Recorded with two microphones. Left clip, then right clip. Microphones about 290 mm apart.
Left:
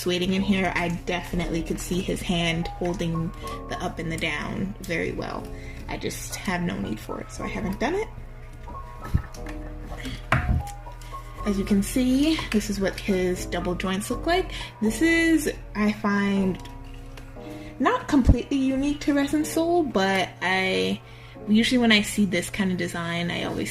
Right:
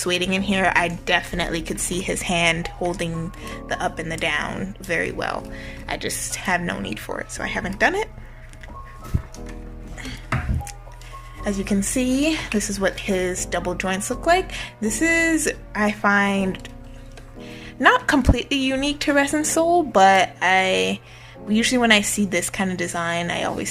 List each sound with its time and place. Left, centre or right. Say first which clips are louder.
0.0 s speech: right 4 dB; right
11.4 s speech: right 2 dB; right
17.8 s speech: right 6 dB; right